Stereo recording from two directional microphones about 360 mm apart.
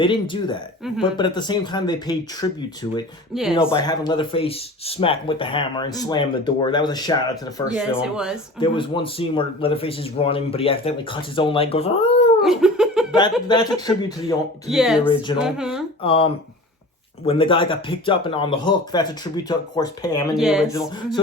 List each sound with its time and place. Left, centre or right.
0.0 s speech: centre
3.3 s speech: centre
3.7 s speech: centre
7.7 s speech: centre
8.5 s speech: centre
12.4 s laughter: centre
13.5 s speech: centre
14.7 s speech: centre
16.0 s speech: centre
20.3 s speech: centre